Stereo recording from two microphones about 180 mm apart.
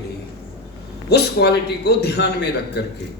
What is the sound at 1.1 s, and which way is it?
A man's voice, 65° left (ahead or behind).